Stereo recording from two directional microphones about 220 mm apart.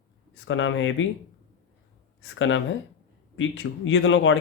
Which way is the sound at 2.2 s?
60° left (ahead or behind).